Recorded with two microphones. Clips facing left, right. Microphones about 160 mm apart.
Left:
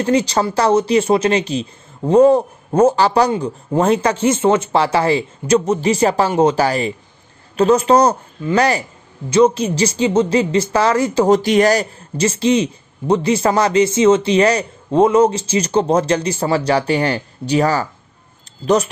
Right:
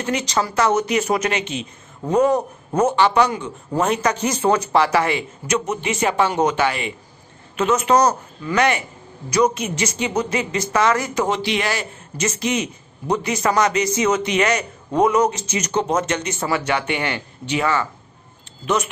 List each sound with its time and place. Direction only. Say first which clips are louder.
0.0 s speech: left 6 dB; 30° left (ahead or behind)